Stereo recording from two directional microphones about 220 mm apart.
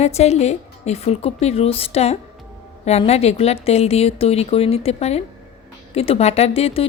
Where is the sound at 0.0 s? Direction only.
30° left (ahead or behind).